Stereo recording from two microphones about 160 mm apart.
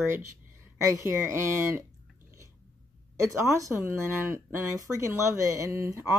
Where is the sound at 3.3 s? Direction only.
20° right (ahead or behind).